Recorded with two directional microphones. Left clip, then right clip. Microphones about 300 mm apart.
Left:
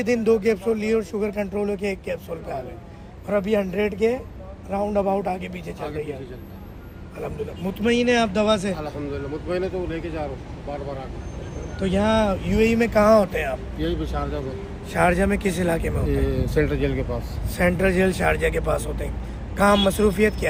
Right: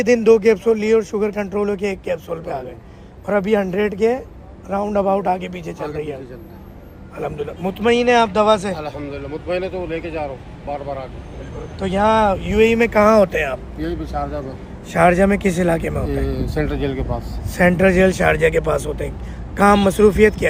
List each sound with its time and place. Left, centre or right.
0.0 s speech: right
7.2 s speech: right
8.7 s a man's voice: centre
11.8 s speech: right
13.7 s speech: centre
14.9 s speech: right
16.0 s speech: centre
17.5 s speech: right